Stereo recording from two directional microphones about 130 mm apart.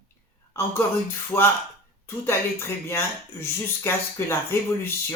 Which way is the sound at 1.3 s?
15° left (ahead or behind).